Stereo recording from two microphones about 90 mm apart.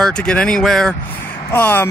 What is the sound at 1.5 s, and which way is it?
Speech, 20° left (ahead or behind).